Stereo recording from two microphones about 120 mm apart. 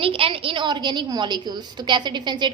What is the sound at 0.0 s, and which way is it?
A woman's voice, 50° right (ahead or behind).